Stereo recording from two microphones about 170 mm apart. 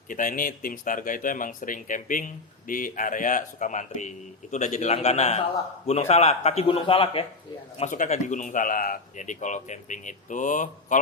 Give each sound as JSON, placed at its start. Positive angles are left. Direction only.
{"t": 0.1, "sound": "a man's voice", "side_deg": 50}
{"t": 7.8, "sound": "speech", "side_deg": 50}